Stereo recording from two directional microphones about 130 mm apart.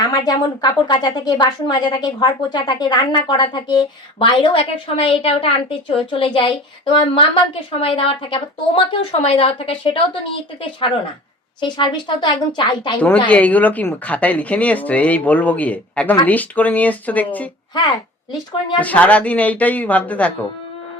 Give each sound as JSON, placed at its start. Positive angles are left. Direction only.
{"t": 0.0, "sound": "a woman's voice", "side_deg": 30}
{"t": 13.2, "sound": "speech", "side_deg": 10}
{"t": 17.7, "sound": "a woman's voice", "side_deg": 30}
{"t": 18.8, "sound": "speech", "side_deg": 10}